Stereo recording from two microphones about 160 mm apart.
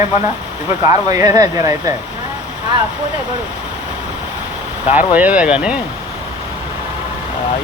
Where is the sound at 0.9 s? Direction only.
20° right (ahead or behind).